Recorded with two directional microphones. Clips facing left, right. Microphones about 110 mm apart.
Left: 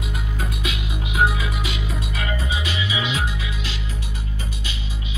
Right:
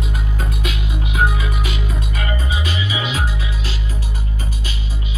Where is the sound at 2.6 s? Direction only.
40° right (ahead or behind).